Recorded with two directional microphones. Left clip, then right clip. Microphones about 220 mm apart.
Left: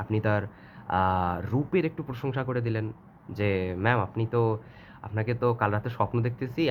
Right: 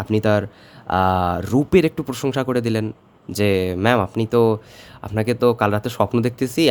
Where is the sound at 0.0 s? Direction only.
55° right (ahead or behind).